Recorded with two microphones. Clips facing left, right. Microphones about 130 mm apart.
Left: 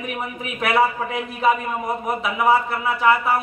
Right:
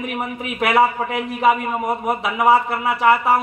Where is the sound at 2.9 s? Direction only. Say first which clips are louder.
Right 3 dB; 30° right (ahead or behind).